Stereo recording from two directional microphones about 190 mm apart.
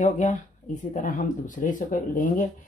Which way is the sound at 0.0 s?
40° left (ahead or behind).